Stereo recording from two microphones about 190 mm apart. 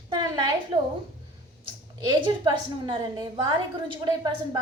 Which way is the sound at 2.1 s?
25° right (ahead or behind).